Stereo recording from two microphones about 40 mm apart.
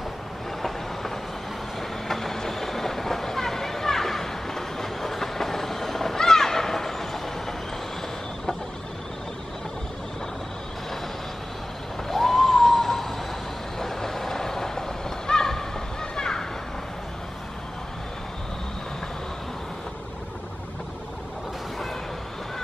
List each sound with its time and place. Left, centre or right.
0.6 s train: centre
1.8 s vehicle: centre
12.1 s vehicle: centre